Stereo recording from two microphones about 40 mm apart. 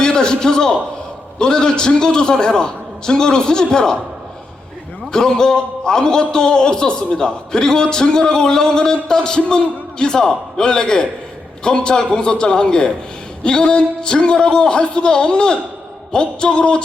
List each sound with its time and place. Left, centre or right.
0.0 s a man's voice: centre
5.1 s a man's voice: centre